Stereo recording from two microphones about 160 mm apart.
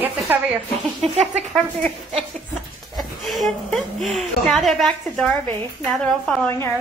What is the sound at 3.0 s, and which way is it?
A woman's voice, centre (ahead or behind).